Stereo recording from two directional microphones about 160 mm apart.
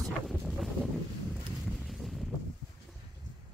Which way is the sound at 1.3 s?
Centre (ahead or behind).